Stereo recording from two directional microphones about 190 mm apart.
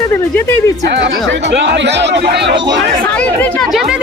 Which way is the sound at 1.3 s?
70° right (ahead or behind).